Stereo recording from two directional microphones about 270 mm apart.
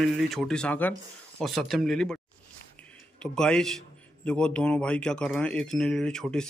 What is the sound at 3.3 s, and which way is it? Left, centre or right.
Speech, centre.